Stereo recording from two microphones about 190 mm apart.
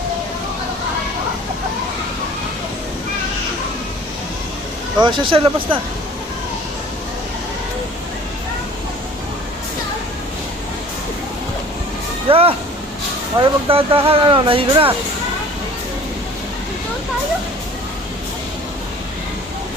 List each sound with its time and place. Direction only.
4.9 s speech: 25° right (ahead or behind)
12.3 s speech: 30° right (ahead or behind)